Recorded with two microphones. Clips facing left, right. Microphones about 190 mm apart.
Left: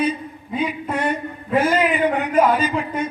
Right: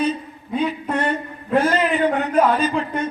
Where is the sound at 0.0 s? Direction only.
10° left (ahead or behind).